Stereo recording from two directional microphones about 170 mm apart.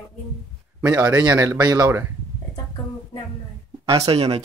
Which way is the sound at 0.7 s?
20° right (ahead or behind).